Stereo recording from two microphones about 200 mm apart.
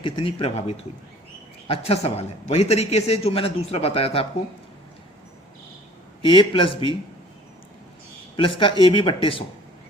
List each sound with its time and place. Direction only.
0.0 s a man's voice: 25° left (ahead or behind)
6.2 s speech: 25° left (ahead or behind)
8.4 s speech: 25° left (ahead or behind)